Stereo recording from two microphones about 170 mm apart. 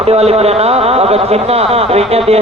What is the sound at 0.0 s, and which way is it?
A man's voice, 35° right (ahead or behind).